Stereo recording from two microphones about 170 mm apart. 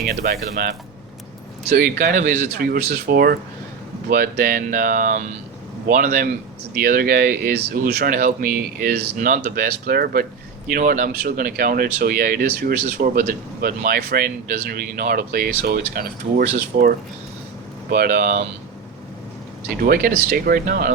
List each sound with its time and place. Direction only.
0.0 s speech: 60° right (ahead or behind)
16.7 s speech: 50° right (ahead or behind)
19.8 s speech: 55° right (ahead or behind)